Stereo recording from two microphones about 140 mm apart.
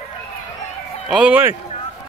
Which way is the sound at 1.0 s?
5° right (ahead or behind).